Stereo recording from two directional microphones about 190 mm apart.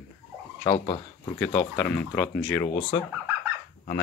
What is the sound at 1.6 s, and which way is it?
Speech, 5° left (ahead or behind).